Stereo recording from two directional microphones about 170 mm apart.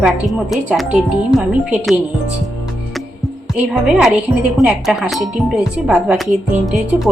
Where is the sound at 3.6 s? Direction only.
5° right (ahead or behind).